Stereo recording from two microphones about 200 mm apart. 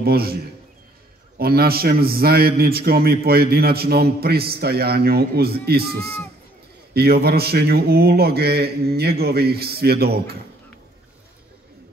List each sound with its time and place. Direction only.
0.0 s a man's voice: 50° right (ahead or behind)
1.4 s a man's voice: 50° right (ahead or behind)